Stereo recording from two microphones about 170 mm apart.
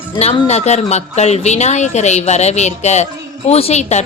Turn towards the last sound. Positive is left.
turn(degrees=40)  # may be behind; listen again after turning